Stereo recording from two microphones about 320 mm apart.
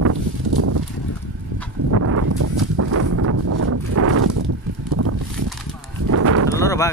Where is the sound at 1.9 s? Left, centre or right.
Right.